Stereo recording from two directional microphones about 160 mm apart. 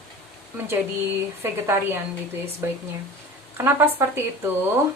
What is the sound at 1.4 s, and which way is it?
A woman's voice, 15° right (ahead or behind).